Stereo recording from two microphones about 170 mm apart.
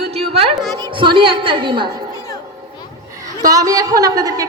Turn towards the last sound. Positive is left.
turn(degrees=-20)  # may be behind; listen again after turning